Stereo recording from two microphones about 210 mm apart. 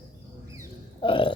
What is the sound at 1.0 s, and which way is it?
Speech, 25° left (ahead or behind).